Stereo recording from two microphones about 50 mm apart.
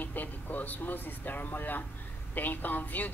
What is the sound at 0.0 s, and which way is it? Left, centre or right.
A woman's voice, left.